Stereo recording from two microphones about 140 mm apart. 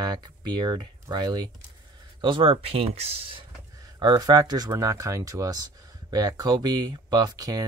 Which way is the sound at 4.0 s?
30° right (ahead or behind).